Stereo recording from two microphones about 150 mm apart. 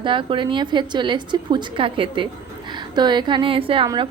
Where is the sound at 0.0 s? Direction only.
35° right (ahead or behind).